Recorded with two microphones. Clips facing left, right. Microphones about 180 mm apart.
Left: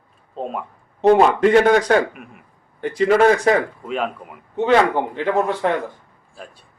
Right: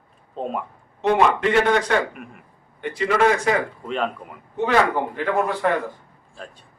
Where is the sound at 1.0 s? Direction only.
40° left (ahead or behind).